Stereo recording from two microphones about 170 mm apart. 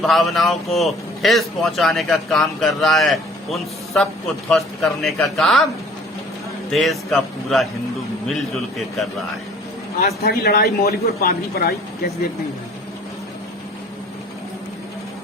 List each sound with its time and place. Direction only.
0.0 s a man's voice: centre (ahead or behind)
6.7 s a man's voice: centre (ahead or behind)
10.2 s a man's voice: 70° left (ahead or behind)